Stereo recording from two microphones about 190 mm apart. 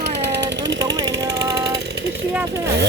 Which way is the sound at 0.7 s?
20° right (ahead or behind).